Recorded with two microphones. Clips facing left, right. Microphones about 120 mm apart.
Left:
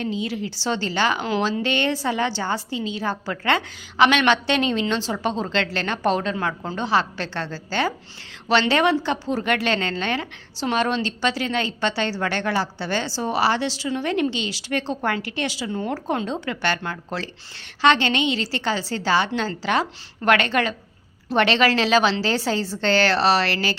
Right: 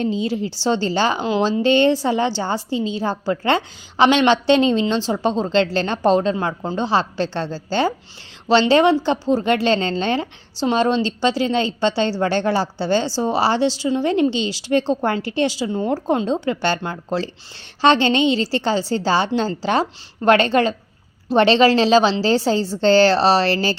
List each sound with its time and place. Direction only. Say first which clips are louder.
0.0 s a woman's voice: right 5 dB; 30° right (ahead or behind)